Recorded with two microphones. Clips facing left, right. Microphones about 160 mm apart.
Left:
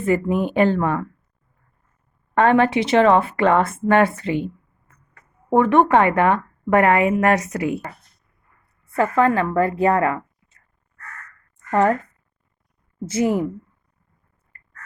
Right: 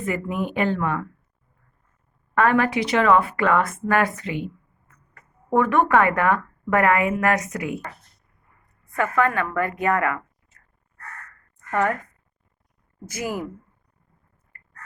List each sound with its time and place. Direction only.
0.0 s speech: 30° left (ahead or behind)
2.3 s a woman's voice: 25° left (ahead or behind)
9.0 s a woman's voice: 30° left (ahead or behind)
11.7 s a woman's voice: 30° left (ahead or behind)
13.1 s a woman's voice: 25° left (ahead or behind)